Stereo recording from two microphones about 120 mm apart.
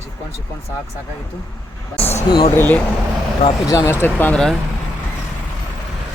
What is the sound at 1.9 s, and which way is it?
Speech, 60° left (ahead or behind).